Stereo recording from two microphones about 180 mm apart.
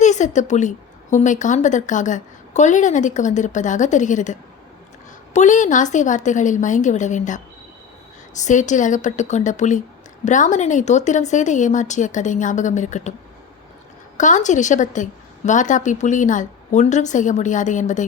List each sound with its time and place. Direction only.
0.0 s a woman's voice: 40° left (ahead or behind)
8.4 s a woman's voice: 45° left (ahead or behind)
14.2 s a woman's voice: 45° left (ahead or behind)